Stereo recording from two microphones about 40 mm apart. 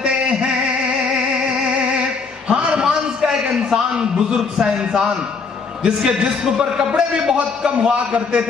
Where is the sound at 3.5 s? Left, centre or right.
Centre.